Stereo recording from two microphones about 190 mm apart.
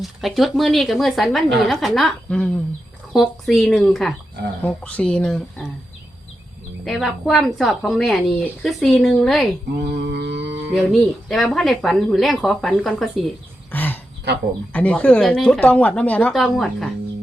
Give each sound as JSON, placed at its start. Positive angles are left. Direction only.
{"t": 0.0, "sound": "a woman's voice", "side_deg": 0}
{"t": 6.8, "sound": "a woman's voice", "side_deg": 0}
{"t": 10.0, "sound": "mantra", "side_deg": -60}
{"t": 10.7, "sound": "a woman's voice", "side_deg": 0}
{"t": 13.7, "sound": "a sound", "side_deg": 10}
{"t": 14.7, "sound": "speech", "side_deg": 5}